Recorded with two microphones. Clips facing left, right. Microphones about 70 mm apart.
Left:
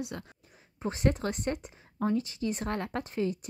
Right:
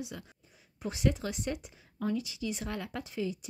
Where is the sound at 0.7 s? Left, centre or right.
Left.